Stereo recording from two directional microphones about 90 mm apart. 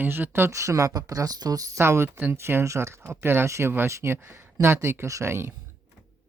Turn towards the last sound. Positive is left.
turn(degrees=-25)  # may be behind; listen again after turning